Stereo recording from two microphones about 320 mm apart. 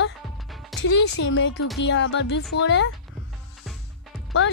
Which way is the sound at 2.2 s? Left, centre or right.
Left.